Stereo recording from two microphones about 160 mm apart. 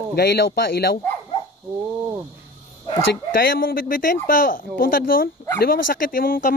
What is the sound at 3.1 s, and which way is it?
Speech, 65° left (ahead or behind).